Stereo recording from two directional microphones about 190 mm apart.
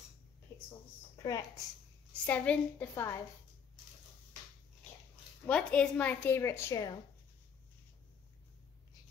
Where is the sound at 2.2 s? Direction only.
5° left (ahead or behind).